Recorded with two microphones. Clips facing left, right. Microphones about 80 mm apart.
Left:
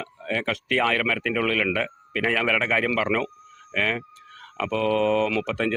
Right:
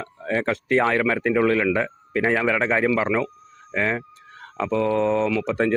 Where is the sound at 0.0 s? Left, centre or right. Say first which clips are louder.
Right 4 dB; right.